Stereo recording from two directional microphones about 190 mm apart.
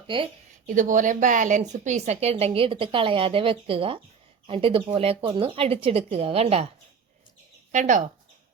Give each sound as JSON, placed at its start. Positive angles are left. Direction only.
{"t": 0.1, "sound": "speech", "side_deg": -25}
{"t": 0.7, "sound": "a woman's voice", "side_deg": -45}
{"t": 7.7, "sound": "a woman's voice", "side_deg": -40}